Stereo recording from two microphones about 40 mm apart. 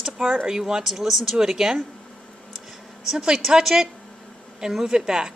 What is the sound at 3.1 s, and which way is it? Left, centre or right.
A woman's voice, centre.